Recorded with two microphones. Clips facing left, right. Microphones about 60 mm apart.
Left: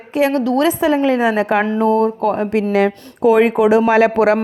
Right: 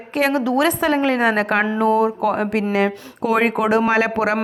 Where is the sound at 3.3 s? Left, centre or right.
Right.